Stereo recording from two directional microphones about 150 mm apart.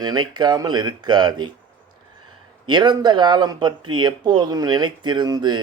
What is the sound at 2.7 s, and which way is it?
Speech, 30° right (ahead or behind).